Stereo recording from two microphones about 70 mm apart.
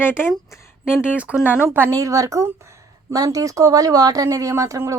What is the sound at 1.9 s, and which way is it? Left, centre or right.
A woman's voice, right.